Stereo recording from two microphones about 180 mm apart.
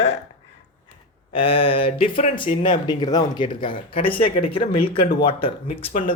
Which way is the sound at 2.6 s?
25° left (ahead or behind).